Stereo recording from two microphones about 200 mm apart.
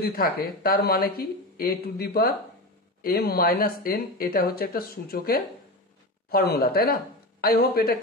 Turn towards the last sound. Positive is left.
turn(degrees=50)  # may be behind; listen again after turning